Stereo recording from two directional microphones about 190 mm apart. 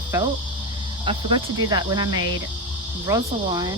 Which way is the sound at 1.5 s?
20° right (ahead or behind).